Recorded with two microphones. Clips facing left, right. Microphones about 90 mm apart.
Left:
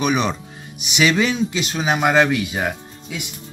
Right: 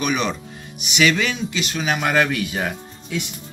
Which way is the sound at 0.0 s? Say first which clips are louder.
Left 2 dB; 25° left (ahead or behind).